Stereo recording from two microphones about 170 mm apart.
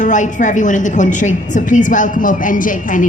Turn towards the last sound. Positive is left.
turn(degrees=50)  # may be behind; listen again after turning